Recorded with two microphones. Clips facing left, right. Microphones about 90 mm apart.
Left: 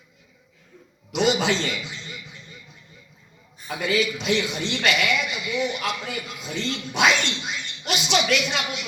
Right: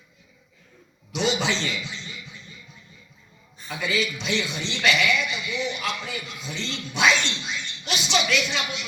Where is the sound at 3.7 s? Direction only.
55° left (ahead or behind).